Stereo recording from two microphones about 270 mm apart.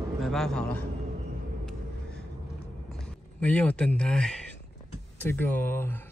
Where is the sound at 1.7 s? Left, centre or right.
Centre.